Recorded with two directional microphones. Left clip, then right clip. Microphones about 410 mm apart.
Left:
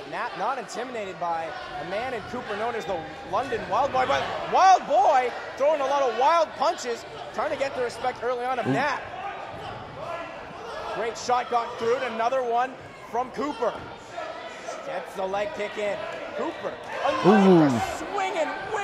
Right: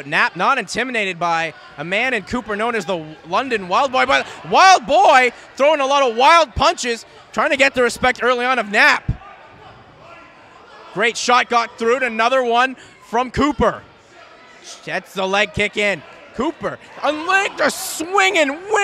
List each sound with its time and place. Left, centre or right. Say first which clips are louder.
0.1 s a man's voice: right 13 dB; right
11.0 s a man's voice: right 11 dB; right
14.9 s a man's voice: right 10 dB; right
17.4 s a man's voice: right 1 dB; right